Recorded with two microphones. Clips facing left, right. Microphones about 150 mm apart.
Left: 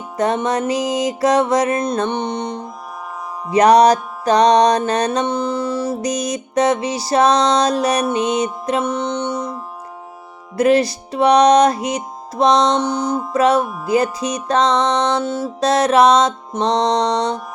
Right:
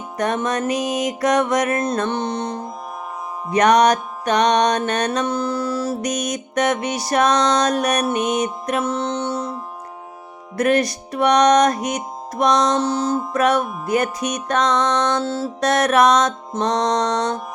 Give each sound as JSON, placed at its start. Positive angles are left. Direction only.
{"t": 0.2, "sound": "music", "side_deg": 30}
{"t": 3.5, "sound": "music", "side_deg": 30}
{"t": 10.5, "sound": "music", "side_deg": 30}
{"t": 12.7, "sound": "music", "side_deg": 15}
{"t": 13.4, "sound": "music", "side_deg": 30}
{"t": 15.1, "sound": "music", "side_deg": 15}
{"t": 15.6, "sound": "music", "side_deg": 25}